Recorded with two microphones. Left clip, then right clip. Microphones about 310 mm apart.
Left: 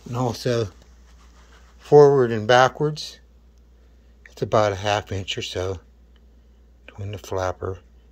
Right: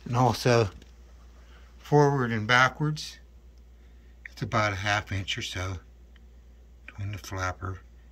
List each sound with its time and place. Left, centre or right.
0.3 s speech: centre
1.8 s speech: centre
4.2 s speech: centre
7.0 s speech: centre